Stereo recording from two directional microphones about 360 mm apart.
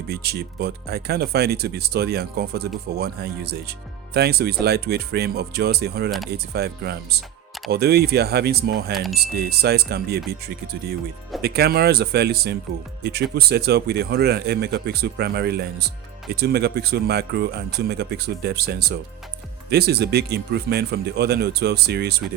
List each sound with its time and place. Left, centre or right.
0.1 s speech: right
6.1 s speech: centre
6.3 s speech: right